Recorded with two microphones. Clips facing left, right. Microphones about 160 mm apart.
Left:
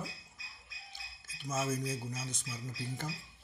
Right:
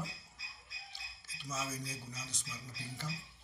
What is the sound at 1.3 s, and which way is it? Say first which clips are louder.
Speech: left 7 dB; 50° left (ahead or behind).